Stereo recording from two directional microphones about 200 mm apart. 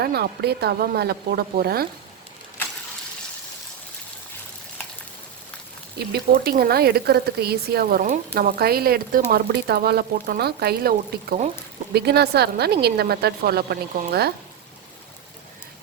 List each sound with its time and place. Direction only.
0.0 s speech: 50° right (ahead or behind)
6.1 s speech: 50° right (ahead or behind)